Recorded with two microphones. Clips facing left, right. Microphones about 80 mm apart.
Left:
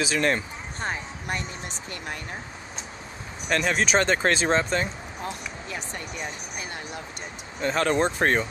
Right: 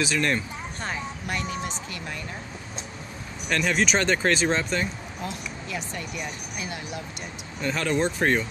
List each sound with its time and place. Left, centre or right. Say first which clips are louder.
0.2 s a sound: left 1 dB; left
3.4 s speech: even; left
7.6 s speech: left 2 dB; left